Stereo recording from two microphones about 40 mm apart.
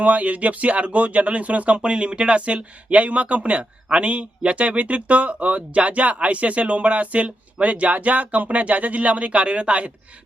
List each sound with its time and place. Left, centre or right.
0.0 s speech: right